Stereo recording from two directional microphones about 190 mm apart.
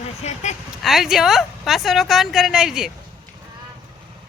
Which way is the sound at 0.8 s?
Centre (ahead or behind).